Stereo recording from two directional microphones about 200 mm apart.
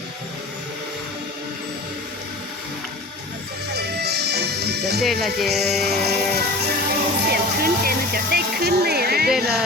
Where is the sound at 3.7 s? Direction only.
55° right (ahead or behind).